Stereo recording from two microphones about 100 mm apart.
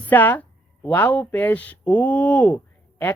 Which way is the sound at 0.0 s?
15° left (ahead or behind).